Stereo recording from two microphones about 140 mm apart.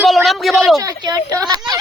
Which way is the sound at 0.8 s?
25° right (ahead or behind).